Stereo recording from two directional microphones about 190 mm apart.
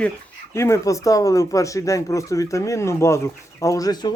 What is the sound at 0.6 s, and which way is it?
Speech, 15° left (ahead or behind).